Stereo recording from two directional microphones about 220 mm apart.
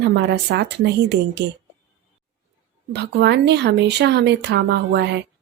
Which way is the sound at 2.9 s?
50° right (ahead or behind).